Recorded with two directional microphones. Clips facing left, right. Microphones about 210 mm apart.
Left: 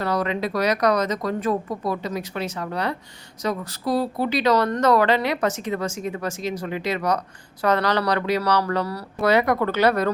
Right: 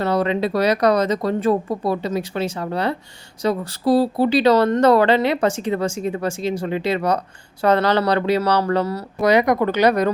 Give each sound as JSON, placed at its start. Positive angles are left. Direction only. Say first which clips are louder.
{"t": 0.0, "sound": "speech", "louder": "right 4 dB", "side_deg": -30}